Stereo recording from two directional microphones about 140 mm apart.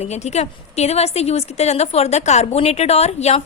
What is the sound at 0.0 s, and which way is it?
A woman's voice, 55° left (ahead or behind).